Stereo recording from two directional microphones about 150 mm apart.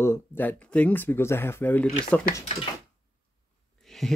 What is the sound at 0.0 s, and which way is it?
Speech, 15° left (ahead or behind).